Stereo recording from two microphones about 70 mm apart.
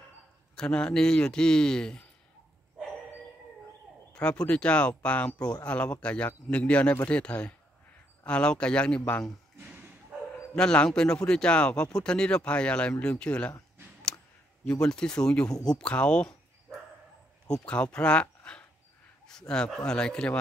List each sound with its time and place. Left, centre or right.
0.6 s speech: centre
4.1 s speech: centre
9.6 s a sound: right
10.5 s speech: centre
14.6 s speech: centre
17.5 s speech: centre
18.2 s a sound: centre
19.2 s a man's voice: centre